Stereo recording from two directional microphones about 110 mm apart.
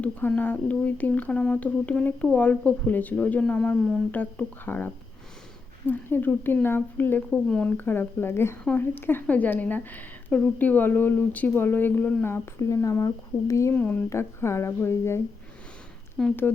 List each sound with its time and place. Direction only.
0.0 s a woman's voice: 15° left (ahead or behind)
7.3 s a woman's voice: 5° left (ahead or behind)
7.8 s a woman's voice: 20° left (ahead or behind)
13.7 s speech: 15° left (ahead or behind)
16.2 s a woman's voice: 10° left (ahead or behind)